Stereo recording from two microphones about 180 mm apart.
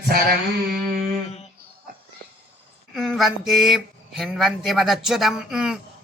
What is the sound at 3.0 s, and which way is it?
Speech, centre (ahead or behind).